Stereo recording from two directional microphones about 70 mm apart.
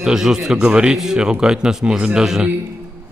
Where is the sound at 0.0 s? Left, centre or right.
Centre.